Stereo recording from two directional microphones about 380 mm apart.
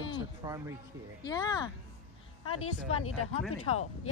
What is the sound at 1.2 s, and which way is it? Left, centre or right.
Speech, centre.